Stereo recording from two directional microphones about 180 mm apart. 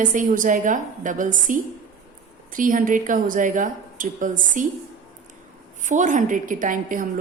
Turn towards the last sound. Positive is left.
turn(degrees=-50)  # may be behind; listen again after turning